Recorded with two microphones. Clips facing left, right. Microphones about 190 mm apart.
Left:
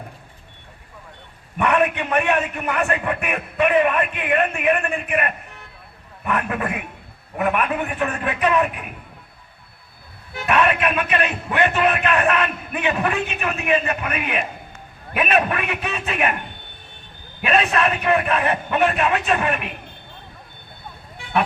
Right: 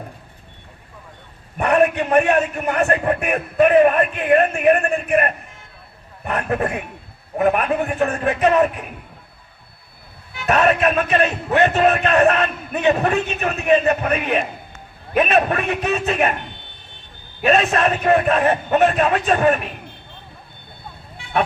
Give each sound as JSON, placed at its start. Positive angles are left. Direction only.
{"t": 1.5, "sound": "a man's voice", "side_deg": -40}
{"t": 10.4, "sound": "a man's voice", "side_deg": -40}
{"t": 17.4, "sound": "a man's voice", "side_deg": -40}